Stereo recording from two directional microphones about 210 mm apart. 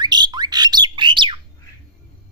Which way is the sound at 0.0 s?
20° right (ahead or behind).